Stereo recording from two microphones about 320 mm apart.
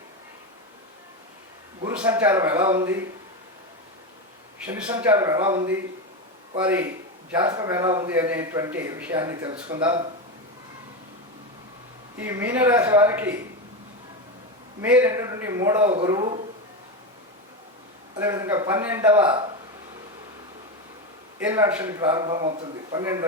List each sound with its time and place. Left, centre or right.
1.8 s a man's voice: centre
4.6 s a man's voice: centre
12.1 s speech: centre
14.8 s a man's voice: centre
18.2 s a man's voice: centre
21.3 s a man's voice: centre